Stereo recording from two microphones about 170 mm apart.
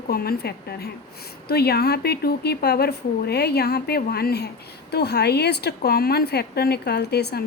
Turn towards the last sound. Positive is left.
turn(degrees=70)  # may be behind; listen again after turning